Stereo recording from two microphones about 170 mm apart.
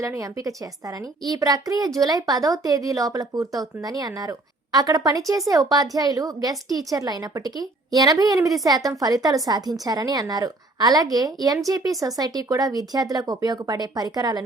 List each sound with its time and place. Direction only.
0.0 s a woman's voice: 20° right (ahead or behind)